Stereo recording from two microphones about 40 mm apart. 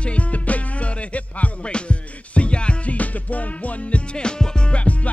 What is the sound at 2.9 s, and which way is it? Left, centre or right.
Music, left.